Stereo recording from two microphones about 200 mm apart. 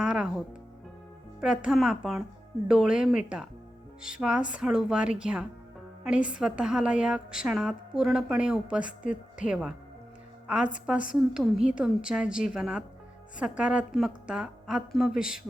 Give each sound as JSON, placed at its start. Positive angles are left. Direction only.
{"t": 0.0, "sound": "a woman's voice", "side_deg": -5}
{"t": 6.1, "sound": "a woman's voice", "side_deg": 40}
{"t": 6.4, "sound": "a woman's voice", "side_deg": -5}